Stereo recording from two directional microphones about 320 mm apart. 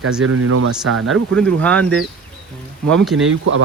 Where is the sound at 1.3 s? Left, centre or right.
Centre.